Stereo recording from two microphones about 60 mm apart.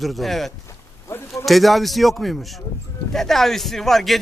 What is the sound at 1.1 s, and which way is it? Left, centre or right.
Speech, left.